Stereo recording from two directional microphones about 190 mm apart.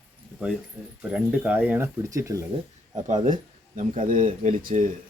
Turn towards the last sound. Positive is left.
turn(degrees=-45)  # may be behind; listen again after turning